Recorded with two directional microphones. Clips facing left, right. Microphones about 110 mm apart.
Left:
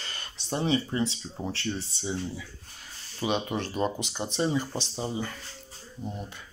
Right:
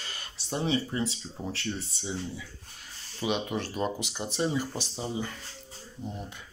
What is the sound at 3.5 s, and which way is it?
Speech, centre (ahead or behind).